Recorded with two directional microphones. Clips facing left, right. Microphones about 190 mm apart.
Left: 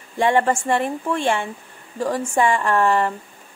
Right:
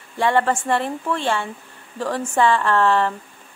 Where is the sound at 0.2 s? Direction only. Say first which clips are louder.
Left 1 dB; 15° left (ahead or behind).